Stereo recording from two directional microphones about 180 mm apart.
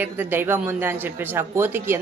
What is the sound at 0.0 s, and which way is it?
Speech, 10° right (ahead or behind).